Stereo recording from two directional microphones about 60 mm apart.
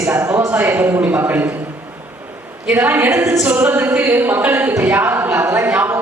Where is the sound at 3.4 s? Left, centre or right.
Right.